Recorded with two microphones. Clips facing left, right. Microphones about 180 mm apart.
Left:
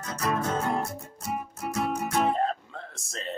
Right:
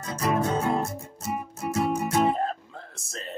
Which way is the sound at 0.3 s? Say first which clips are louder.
Right 3 dB; 20° right (ahead or behind).